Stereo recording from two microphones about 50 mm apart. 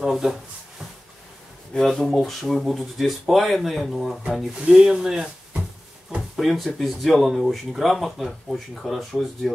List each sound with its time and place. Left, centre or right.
0.0 s speech: centre
1.7 s speech: centre
4.6 s speech: centre
6.3 s speech: centre